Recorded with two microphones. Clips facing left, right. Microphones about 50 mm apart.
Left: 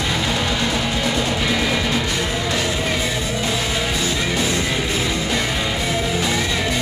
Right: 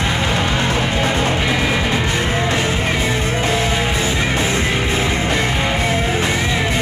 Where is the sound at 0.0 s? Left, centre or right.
Right.